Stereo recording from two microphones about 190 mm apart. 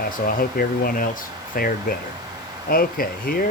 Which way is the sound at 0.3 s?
50° left (ahead or behind).